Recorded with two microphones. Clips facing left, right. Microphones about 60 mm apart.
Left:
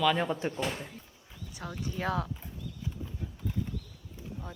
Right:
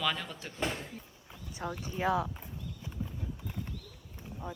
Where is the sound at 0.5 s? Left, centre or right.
Right.